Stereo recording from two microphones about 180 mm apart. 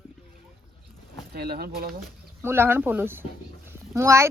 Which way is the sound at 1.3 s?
55° right (ahead or behind).